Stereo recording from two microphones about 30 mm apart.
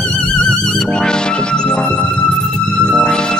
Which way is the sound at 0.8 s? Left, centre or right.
Left.